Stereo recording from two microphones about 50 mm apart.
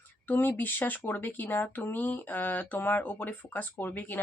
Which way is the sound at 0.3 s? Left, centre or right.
Left.